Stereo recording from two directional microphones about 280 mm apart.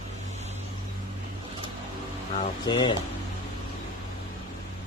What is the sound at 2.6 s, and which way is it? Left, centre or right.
Speech, centre.